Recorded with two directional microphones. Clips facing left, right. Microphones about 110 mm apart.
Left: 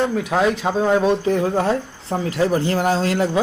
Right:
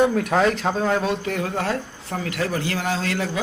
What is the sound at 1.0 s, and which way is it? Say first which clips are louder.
Speech: left 7 dB; 30° left (ahead or behind).